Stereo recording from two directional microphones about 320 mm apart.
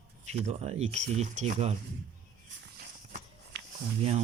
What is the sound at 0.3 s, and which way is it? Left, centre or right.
Speech, centre.